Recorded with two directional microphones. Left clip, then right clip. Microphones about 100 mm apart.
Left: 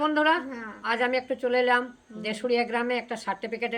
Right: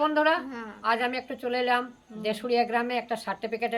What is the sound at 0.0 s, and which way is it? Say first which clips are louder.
A woman's voice: even; 35° right (ahead or behind).